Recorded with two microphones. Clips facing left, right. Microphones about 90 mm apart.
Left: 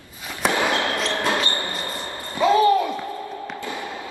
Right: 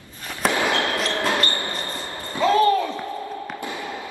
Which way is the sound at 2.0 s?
15° left (ahead or behind).